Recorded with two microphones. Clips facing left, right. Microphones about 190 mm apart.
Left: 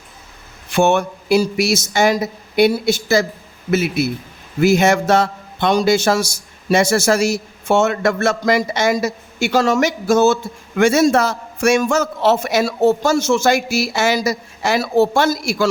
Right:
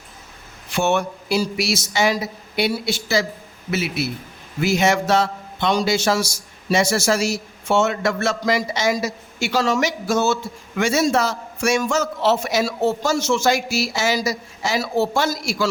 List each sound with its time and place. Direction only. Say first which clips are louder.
0.7 s a man's voice: left 5 dB; 50° left (ahead or behind)